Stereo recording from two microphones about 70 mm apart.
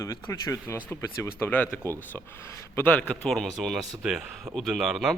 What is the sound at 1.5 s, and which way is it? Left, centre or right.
Speech, left.